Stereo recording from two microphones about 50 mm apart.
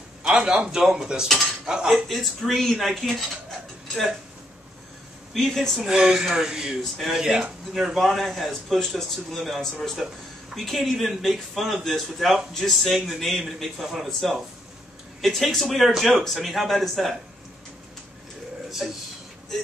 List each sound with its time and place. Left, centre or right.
0.2 s a man's voice: centre
0.7 s speech: centre
2.0 s a man's voice: centre
5.3 s a man's voice: centre
5.8 s speech: centre
7.7 s a man's voice: centre